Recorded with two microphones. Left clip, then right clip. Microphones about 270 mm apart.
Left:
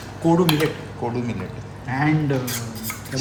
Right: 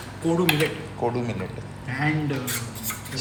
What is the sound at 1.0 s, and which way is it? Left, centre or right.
Speech, centre.